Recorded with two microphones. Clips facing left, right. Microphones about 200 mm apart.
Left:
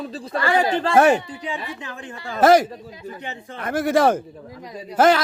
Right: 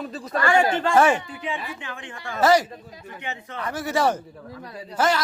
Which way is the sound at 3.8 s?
55° left (ahead or behind).